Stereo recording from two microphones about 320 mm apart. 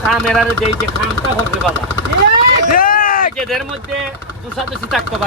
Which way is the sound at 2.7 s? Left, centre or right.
Left.